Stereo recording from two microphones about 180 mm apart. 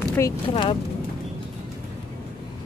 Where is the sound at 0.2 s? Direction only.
25° left (ahead or behind).